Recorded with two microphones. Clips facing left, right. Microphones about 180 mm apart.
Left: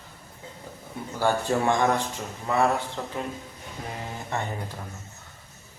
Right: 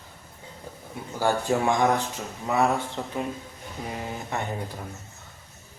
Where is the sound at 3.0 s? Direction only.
15° right (ahead or behind).